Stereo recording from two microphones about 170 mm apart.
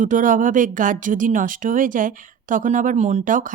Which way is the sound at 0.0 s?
50° right (ahead or behind).